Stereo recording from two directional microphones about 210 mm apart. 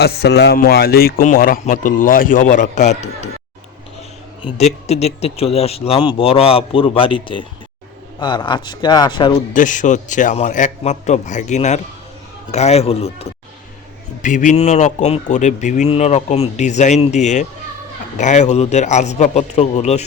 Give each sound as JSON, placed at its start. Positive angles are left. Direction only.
{"t": 0.0, "sound": "speech", "side_deg": 50}
{"t": 4.4, "sound": "speech", "side_deg": 30}
{"t": 9.5, "sound": "speech", "side_deg": 35}